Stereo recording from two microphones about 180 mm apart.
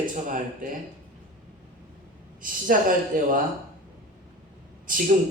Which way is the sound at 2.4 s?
50° right (ahead or behind).